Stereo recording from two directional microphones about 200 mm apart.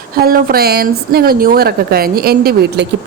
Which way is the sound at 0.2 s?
50° right (ahead or behind).